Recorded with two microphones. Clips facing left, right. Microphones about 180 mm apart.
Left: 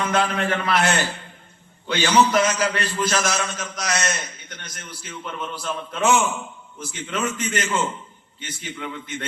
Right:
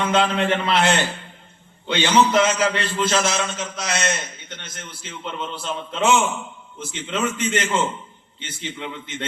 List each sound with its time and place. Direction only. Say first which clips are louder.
0.0 s a man's voice: right 2 dB; 25° right (ahead or behind)